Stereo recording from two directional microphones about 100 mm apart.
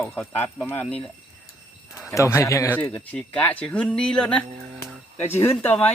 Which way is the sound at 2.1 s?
30° left (ahead or behind).